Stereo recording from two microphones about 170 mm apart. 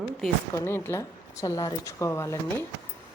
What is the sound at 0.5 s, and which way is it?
A woman's voice, 15° left (ahead or behind).